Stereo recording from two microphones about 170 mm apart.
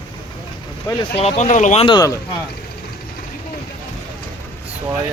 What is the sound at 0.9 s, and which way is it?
Speech, 20° left (ahead or behind).